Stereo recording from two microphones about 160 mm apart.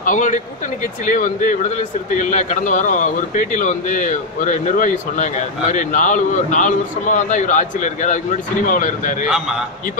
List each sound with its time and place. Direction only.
0.0 s a man's voice: 55° left (ahead or behind)